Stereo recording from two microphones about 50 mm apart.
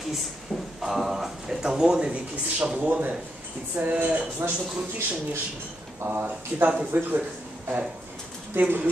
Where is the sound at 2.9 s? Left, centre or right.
Right.